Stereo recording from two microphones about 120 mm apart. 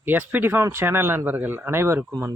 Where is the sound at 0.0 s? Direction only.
15° right (ahead or behind).